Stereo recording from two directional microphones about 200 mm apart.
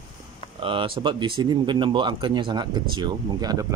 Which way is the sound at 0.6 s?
25° right (ahead or behind).